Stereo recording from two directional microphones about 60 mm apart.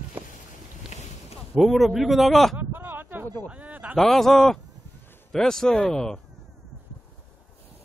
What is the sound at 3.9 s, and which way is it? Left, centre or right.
Speech, centre.